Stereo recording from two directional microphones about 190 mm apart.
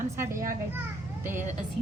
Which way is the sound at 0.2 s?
15° right (ahead or behind).